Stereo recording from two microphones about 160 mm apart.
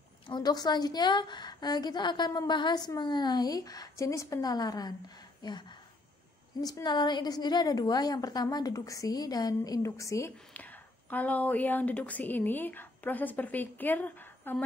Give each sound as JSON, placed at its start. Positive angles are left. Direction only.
{"t": 0.3, "sound": "a woman's voice", "side_deg": 25}